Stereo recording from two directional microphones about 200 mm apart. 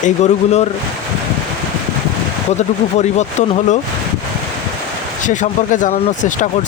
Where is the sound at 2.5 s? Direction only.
35° left (ahead or behind).